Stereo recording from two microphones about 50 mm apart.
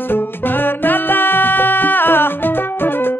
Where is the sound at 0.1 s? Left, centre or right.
Left.